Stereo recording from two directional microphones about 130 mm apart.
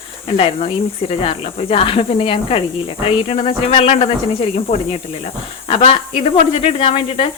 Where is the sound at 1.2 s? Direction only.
45° left (ahead or behind).